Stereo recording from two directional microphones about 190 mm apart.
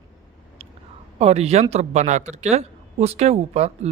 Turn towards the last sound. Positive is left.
turn(degrees=-35)  # may be behind; listen again after turning